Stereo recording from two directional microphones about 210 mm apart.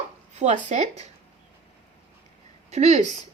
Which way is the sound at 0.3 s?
35° right (ahead or behind).